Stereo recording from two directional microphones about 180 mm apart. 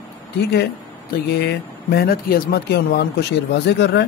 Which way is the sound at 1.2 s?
65° left (ahead or behind).